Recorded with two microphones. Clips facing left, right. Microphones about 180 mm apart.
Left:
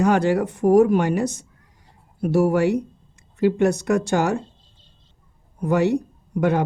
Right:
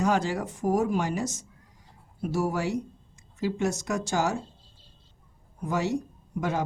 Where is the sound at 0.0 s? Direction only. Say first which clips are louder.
Left 8 dB; 65° left (ahead or behind).